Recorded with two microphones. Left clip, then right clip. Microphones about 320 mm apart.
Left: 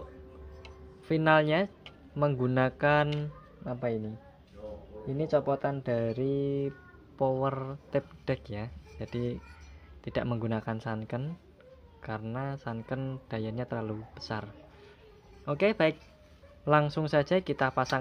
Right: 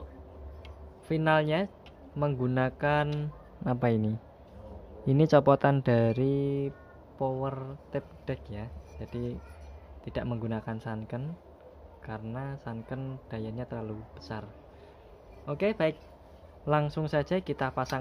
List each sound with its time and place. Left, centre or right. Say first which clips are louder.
1.0 s a man's voice: left 2 dB; centre
3.6 s speech: right 4 dB; centre
7.2 s a man's voice: left 3 dB; centre